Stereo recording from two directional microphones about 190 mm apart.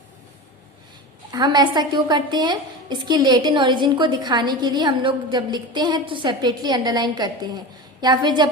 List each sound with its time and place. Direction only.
1.3 s a woman's voice: 20° right (ahead or behind)